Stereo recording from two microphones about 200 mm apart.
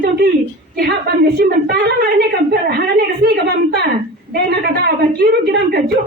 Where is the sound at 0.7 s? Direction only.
50° right (ahead or behind).